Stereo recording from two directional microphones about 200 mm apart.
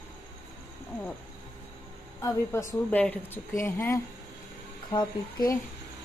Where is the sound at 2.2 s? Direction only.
15° left (ahead or behind).